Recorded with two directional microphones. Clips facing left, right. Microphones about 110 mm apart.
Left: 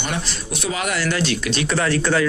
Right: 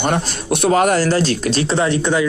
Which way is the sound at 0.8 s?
45° right (ahead or behind).